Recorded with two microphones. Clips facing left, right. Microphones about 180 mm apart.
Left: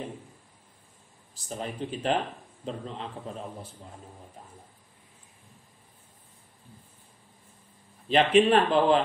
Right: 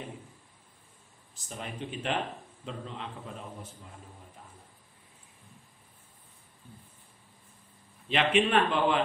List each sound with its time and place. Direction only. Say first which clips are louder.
1.3 s speech: left 5 dB; 35° left (ahead or behind)
8.1 s speech: left 5 dB; 35° left (ahead or behind)